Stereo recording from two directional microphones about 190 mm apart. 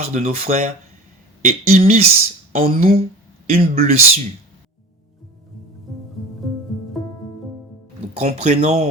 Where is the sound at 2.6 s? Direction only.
45° right (ahead or behind).